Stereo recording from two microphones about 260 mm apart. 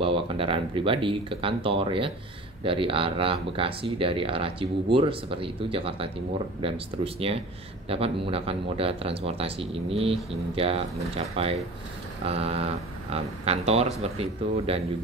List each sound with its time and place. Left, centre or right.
0.0 s speech: right